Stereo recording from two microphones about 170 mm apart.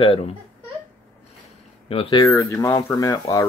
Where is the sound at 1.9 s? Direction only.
30° left (ahead or behind).